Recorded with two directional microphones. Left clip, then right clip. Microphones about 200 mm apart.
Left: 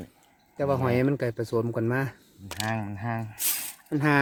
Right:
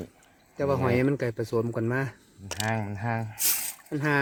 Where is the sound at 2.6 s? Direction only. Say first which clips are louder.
Right 1 dB; 25° right (ahead or behind).